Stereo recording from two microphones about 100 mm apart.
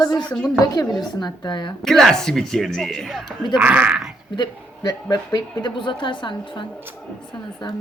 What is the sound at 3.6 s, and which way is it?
Speech, 15° right (ahead or behind).